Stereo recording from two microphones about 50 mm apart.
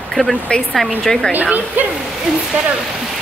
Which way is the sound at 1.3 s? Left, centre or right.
Right.